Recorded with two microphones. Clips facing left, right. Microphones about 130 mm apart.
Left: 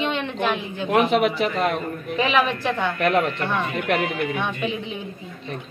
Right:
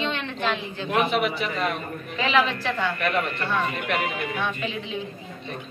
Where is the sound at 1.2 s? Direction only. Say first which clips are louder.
Left 5 dB; 75° left (ahead or behind).